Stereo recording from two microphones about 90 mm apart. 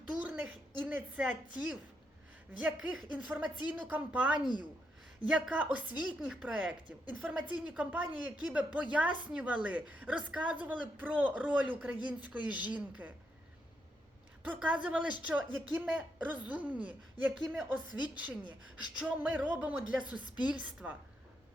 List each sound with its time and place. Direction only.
0.1 s a woman's voice: 15° right (ahead or behind)
14.4 s a woman's voice: 15° right (ahead or behind)
17.3 s speech: centre (ahead or behind)
18.1 s a woman's voice: 15° right (ahead or behind)